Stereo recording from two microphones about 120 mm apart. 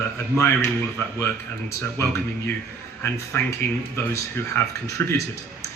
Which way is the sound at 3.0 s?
20° left (ahead or behind).